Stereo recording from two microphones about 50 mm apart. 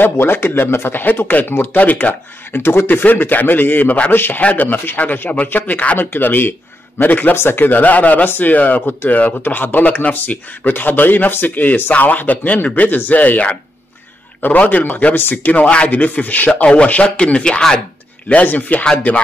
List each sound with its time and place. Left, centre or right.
0.0 s speech: left
2.6 s speech: left
2.9 s speech: left
4.1 s speech: left
4.4 s speech: left
5.9 s speech: left
15.1 s speech: left
15.6 s speech: left
16.0 s speech: left; by 17.8 s centre
18.3 s speech: left